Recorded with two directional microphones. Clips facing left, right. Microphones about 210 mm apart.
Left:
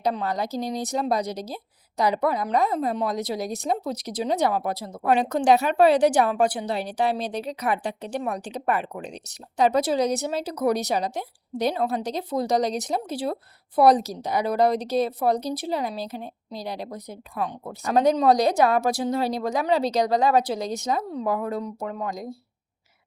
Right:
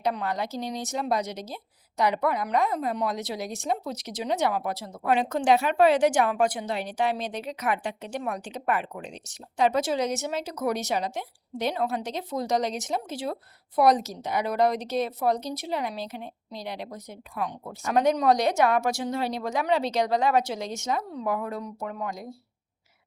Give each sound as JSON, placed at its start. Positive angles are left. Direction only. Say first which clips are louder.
{"t": 0.0, "sound": "a woman's voice", "louder": "left 2 dB", "side_deg": 35}